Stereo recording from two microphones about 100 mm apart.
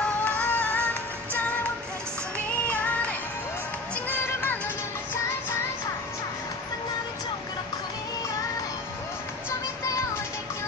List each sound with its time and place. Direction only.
0.0 s music: 15° left (ahead or behind)
2.3 s music: 15° left (ahead or behind)